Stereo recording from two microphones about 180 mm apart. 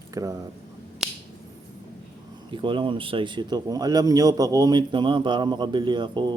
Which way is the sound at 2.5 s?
25° right (ahead or behind).